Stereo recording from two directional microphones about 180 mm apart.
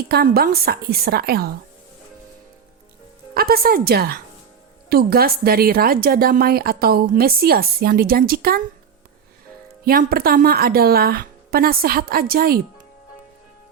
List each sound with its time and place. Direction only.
0.0 s a woman's voice: 60° right (ahead or behind)
3.3 s a woman's voice: 60° right (ahead or behind)
9.8 s a woman's voice: 55° right (ahead or behind)